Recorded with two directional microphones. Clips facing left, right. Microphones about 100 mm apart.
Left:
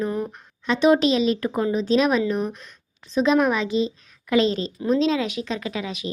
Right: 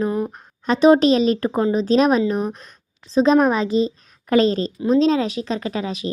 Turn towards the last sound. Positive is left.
turn(degrees=-35)  # may be behind; listen again after turning